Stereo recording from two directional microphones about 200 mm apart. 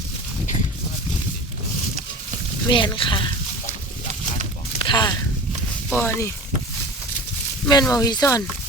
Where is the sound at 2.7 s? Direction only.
25° left (ahead or behind).